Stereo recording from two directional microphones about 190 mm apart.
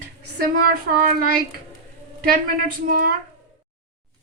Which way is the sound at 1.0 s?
50° right (ahead or behind).